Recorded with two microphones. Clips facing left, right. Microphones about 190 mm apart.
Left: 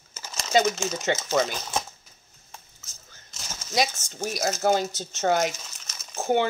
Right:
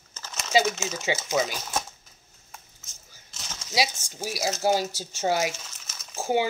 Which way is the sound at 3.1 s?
5° right (ahead or behind).